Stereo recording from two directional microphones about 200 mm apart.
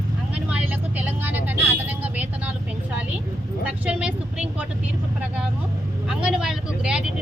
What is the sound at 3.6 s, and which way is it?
Vehicle, 5° right (ahead or behind).